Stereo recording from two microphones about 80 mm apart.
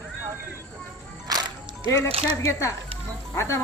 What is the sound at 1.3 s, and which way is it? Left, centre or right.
Music, right.